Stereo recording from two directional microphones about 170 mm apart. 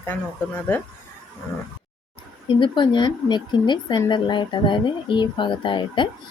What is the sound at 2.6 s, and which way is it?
Speech, 25° left (ahead or behind).